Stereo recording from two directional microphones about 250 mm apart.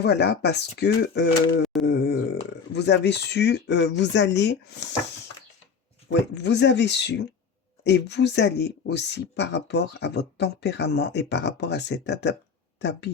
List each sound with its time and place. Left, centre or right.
0.0 s speech: left
1.6 s wail: centre
1.9 s a sound: left
2.7 s speech: left
6.1 s speech: left